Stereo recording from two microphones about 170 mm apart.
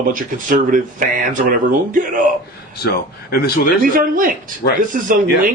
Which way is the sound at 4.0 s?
55° right (ahead or behind).